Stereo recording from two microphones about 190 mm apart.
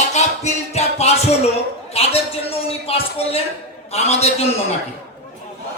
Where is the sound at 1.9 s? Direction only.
35° left (ahead or behind).